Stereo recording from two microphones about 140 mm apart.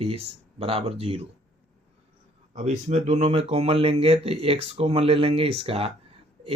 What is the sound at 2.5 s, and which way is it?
Speech, 55° right (ahead or behind).